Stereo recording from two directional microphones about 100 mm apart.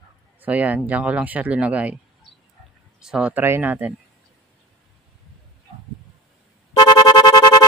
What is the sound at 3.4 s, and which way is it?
Speech, 20° right (ahead or behind).